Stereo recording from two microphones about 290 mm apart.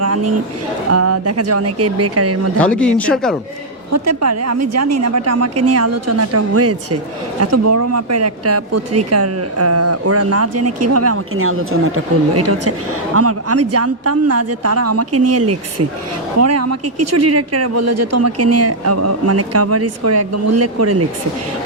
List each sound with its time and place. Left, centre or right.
0.0 s a sound: right
0.9 s a woman's voice: right
2.6 s speech: centre
3.9 s a woman's voice: right